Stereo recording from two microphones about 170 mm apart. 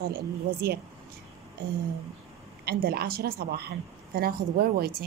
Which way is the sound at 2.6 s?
65° right (ahead or behind).